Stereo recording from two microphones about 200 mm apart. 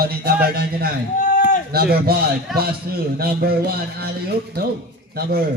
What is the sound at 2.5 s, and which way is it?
Speech, centre (ahead or behind).